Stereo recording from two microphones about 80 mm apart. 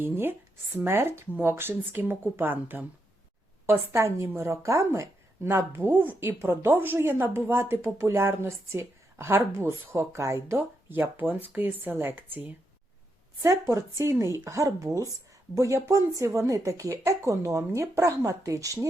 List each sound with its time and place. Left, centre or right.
0.0 s a woman's voice: right
10.6 s a woman's voice: right
13.4 s speech: right